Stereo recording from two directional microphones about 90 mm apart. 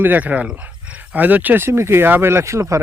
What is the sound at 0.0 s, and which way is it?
Speech, 20° right (ahead or behind).